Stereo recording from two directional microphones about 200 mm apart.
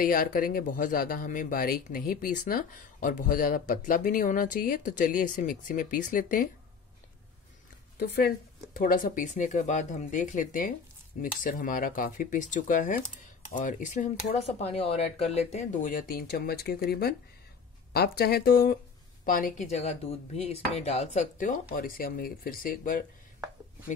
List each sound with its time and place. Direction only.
0.0 s speech: 45° left (ahead or behind)
8.0 s speech: 50° left (ahead or behind)